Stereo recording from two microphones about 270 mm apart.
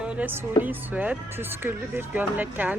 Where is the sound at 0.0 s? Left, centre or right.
Centre.